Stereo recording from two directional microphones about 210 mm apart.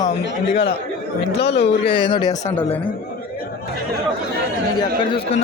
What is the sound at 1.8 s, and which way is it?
Speech, 25° left (ahead or behind).